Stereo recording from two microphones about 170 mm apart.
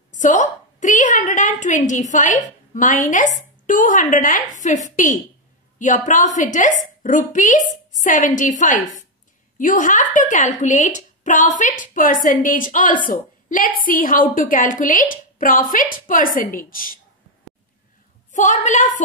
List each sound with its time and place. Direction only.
0.1 s a woman's voice: 50° left (ahead or behind)
18.3 s a woman's voice: 45° left (ahead or behind)